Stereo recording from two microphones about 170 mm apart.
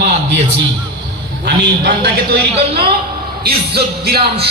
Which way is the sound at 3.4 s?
70° right (ahead or behind).